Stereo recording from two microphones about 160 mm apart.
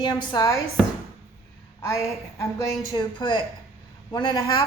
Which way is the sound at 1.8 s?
20° left (ahead or behind).